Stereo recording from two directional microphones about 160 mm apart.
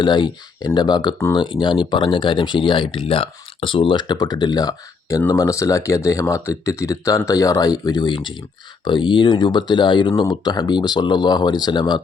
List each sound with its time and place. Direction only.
0.0 s speech: 30° left (ahead or behind)